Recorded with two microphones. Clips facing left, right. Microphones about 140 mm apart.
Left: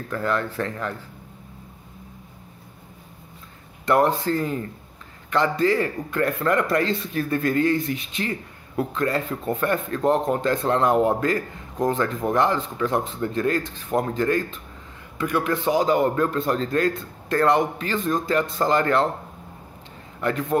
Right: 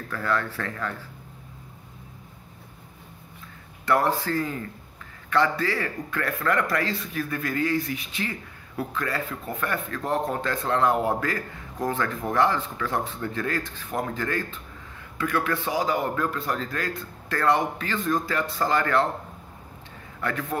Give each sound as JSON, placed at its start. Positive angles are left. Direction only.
{"t": 0.1, "sound": "a man's voice", "side_deg": 20}
{"t": 3.8, "sound": "a man's voice", "side_deg": 20}
{"t": 20.2, "sound": "a man's voice", "side_deg": 20}